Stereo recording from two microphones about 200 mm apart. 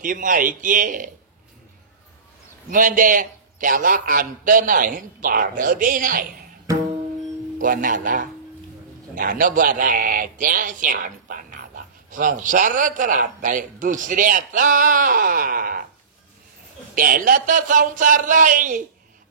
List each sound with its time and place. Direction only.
0.0 s a man's voice: 40° right (ahead or behind)
2.7 s speech: 45° right (ahead or behind)
7.5 s a man's voice: 45° right (ahead or behind)
16.9 s a man's voice: 45° right (ahead or behind)